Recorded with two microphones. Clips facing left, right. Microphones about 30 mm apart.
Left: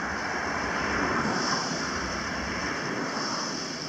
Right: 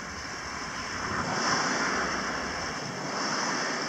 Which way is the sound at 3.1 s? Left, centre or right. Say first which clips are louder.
Right 1 dB; centre.